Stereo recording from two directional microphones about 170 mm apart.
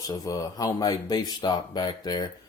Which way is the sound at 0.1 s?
20° left (ahead or behind).